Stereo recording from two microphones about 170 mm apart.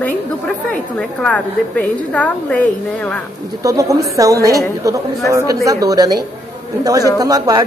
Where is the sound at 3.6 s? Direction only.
20° right (ahead or behind).